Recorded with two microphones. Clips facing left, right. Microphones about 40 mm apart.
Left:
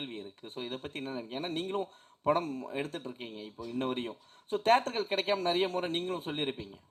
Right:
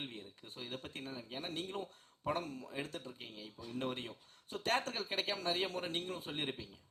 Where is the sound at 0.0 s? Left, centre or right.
Left.